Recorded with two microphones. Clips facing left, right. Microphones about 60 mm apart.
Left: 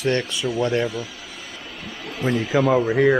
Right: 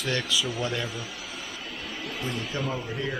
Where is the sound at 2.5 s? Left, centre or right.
Left.